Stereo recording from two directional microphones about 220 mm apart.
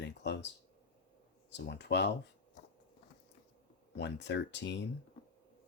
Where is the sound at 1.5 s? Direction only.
50° left (ahead or behind).